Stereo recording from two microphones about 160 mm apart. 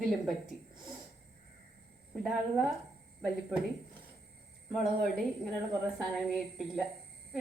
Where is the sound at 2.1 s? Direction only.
Centre (ahead or behind).